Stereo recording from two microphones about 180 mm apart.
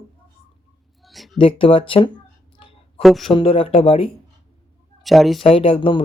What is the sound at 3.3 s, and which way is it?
Speech, 30° left (ahead or behind).